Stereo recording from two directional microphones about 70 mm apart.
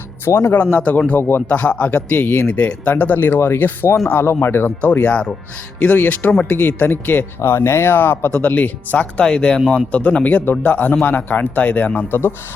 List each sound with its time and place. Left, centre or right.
0.4 s speech: left
2.5 s speech: centre